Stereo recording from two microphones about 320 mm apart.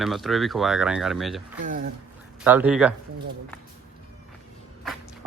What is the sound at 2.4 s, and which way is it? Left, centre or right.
Speech, centre.